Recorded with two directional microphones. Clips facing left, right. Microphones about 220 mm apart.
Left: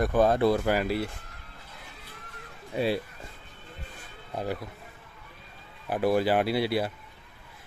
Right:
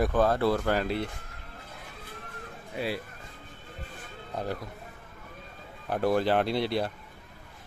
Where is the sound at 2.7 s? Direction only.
25° left (ahead or behind).